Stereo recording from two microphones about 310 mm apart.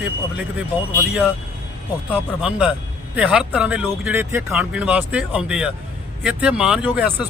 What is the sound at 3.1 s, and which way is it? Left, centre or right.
Speech, centre.